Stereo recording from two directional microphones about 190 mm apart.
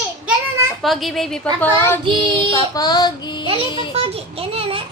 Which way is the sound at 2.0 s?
25° right (ahead or behind).